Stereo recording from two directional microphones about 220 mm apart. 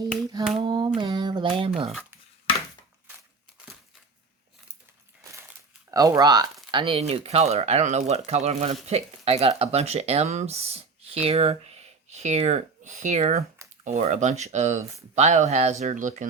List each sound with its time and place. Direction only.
0.6 s speech: 20° right (ahead or behind)
5.9 s speech: 15° right (ahead or behind); by 16.3 s 35° right (ahead or behind)